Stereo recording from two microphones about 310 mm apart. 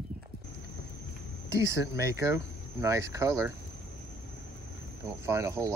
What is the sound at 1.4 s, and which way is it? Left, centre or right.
Speech, centre.